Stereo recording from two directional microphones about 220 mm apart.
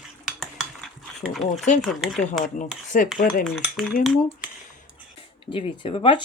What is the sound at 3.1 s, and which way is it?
Speech, 40° left (ahead or behind).